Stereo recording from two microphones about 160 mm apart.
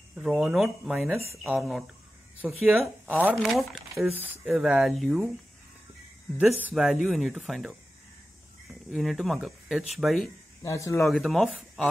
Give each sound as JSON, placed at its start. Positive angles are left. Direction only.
{"t": 0.1, "sound": "speech", "side_deg": -5}
{"t": 3.2, "sound": "speech", "side_deg": -10}
{"t": 6.4, "sound": "speech", "side_deg": -5}
{"t": 8.9, "sound": "speech", "side_deg": 0}
{"t": 10.6, "sound": "a man's voice", "side_deg": 20}
{"t": 11.1, "sound": "speech", "side_deg": 0}